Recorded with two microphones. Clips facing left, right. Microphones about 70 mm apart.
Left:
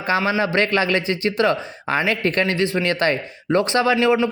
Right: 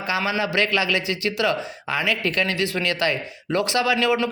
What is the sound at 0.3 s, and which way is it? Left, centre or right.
A man's voice, left.